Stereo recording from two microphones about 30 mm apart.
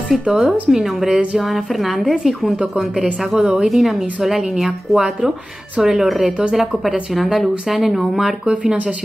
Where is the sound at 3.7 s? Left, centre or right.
Centre.